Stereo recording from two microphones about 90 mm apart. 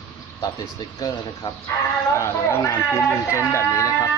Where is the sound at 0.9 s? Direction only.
45° left (ahead or behind).